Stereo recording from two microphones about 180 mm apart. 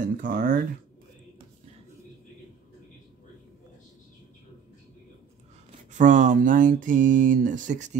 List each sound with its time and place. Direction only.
0.2 s speech: 50° right (ahead or behind)
5.9 s speech: 45° right (ahead or behind)